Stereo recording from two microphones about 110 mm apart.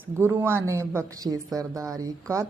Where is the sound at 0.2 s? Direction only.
20° right (ahead or behind).